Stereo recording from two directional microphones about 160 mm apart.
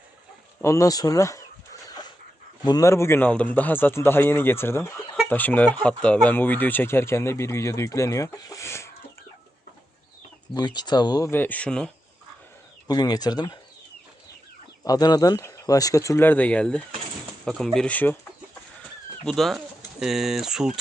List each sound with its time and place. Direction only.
0.6 s speech: 20° left (ahead or behind)
2.6 s speech: 20° left (ahead or behind)
10.5 s speech: 25° left (ahead or behind); by 11.9 s 5° left (ahead or behind)
12.9 s speech: 25° left (ahead or behind)
14.8 s speech: 25° left (ahead or behind)
19.2 s speech: centre (ahead or behind)